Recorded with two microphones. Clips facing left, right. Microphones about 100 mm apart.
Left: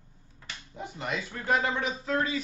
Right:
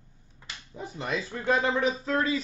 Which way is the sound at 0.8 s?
35° right (ahead or behind).